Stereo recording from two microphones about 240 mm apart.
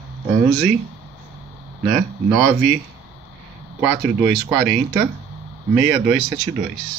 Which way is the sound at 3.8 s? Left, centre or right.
Centre.